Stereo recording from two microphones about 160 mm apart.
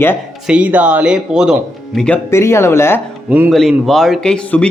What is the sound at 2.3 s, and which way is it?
Speech, 15° left (ahead or behind).